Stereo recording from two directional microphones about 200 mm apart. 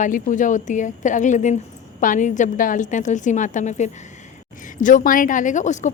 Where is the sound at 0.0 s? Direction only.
40° left (ahead or behind).